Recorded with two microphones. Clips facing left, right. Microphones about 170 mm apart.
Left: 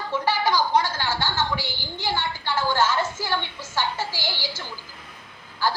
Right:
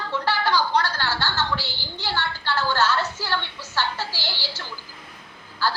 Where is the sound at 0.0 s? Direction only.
15° left (ahead or behind).